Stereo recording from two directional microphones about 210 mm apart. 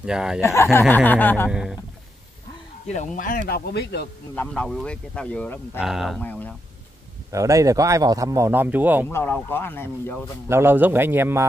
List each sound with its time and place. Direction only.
0.0 s speech: 5° right (ahead or behind)
0.4 s speech: 15° left (ahead or behind)
1.5 s speech: 5° right (ahead or behind)
2.9 s speech: 35° left (ahead or behind)
4.4 s speech: 5° left (ahead or behind)
7.2 s speech: 15° right (ahead or behind)
9.1 s speech: 10° left (ahead or behind)
10.5 s speech: 10° right (ahead or behind)